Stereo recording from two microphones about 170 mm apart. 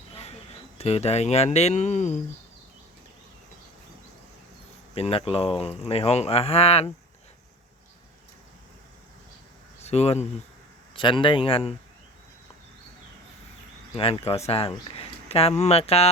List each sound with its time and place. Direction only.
0.8 s speech: 35° left (ahead or behind)
4.9 s speech: 35° left (ahead or behind)
9.8 s speech: 40° left (ahead or behind)
13.9 s speech: 35° left (ahead or behind)